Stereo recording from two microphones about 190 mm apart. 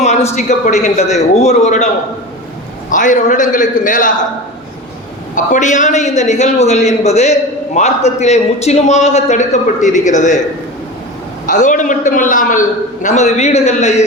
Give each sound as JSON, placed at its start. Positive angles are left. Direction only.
{"t": 0.0, "sound": "a sound", "side_deg": 35}
{"t": 0.3, "sound": "a man's voice", "side_deg": 35}
{"t": 2.9, "sound": "a man's voice", "side_deg": 45}
{"t": 5.3, "sound": "a man's voice", "side_deg": 40}
{"t": 11.4, "sound": "a man's voice", "side_deg": 40}